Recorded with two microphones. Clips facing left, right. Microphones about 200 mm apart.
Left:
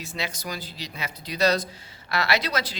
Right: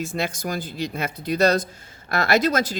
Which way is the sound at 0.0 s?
50° right (ahead or behind).